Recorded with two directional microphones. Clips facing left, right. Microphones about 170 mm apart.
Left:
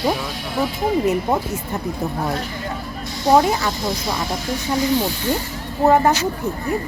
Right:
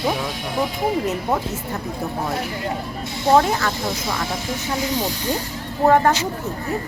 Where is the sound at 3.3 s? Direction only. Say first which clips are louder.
Left 1 dB; 10° left (ahead or behind).